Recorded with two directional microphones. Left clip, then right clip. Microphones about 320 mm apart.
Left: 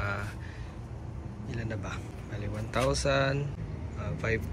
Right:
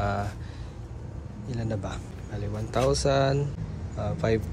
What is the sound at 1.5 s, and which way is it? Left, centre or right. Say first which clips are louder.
Speech: right 5 dB; centre.